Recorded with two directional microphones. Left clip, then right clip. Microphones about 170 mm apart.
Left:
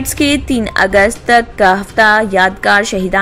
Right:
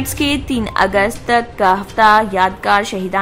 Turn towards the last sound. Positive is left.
turn(degrees=20)  # may be behind; listen again after turning